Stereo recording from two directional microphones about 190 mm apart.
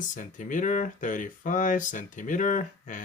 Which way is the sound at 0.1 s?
40° left (ahead or behind).